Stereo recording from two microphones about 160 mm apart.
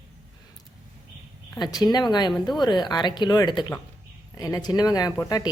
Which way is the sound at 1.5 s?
25° left (ahead or behind).